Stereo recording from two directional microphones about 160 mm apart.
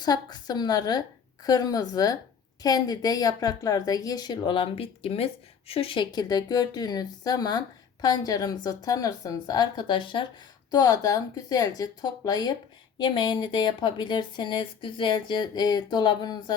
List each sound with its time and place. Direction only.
0.0 s speech: 25° left (ahead or behind)